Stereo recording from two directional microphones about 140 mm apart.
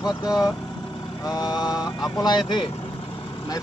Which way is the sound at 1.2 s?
30° left (ahead or behind).